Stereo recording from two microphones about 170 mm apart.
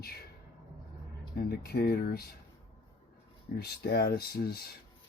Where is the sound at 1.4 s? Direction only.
70° left (ahead or behind).